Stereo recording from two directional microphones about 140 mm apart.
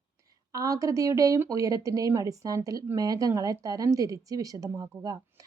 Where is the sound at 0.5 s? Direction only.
25° right (ahead or behind).